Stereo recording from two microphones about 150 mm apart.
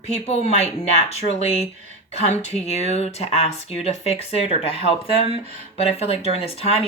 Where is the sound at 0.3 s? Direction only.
45° left (ahead or behind).